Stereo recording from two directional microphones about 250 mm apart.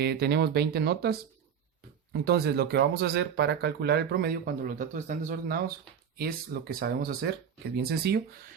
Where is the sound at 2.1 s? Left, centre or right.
Right.